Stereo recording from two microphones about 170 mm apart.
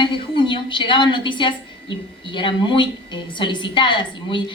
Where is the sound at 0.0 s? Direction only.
30° left (ahead or behind).